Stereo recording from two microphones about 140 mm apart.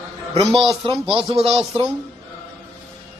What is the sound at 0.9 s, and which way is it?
Speech, 40° right (ahead or behind).